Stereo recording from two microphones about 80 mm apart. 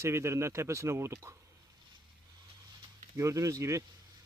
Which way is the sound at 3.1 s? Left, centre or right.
Right.